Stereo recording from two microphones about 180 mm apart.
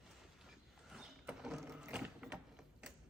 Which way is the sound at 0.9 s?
Centre (ahead or behind).